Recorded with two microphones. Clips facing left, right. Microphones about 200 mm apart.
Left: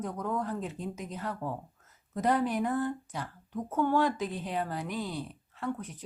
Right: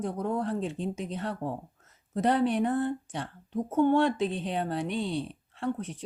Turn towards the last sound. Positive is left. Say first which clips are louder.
# right 3 dB
turn(degrees=-25)  # may be behind; listen again after turning